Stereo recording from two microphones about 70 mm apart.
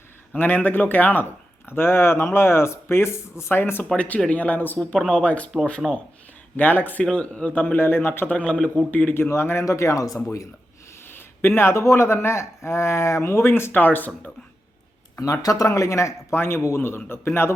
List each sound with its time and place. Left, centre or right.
0.3 s speech: left
5.8 s speech: centre
6.6 s speech: left
7.0 s speech: centre; by 8.4 s left
8.4 s speech: centre
9.1 s speech: left
11.1 s speech: left
15.2 s speech: left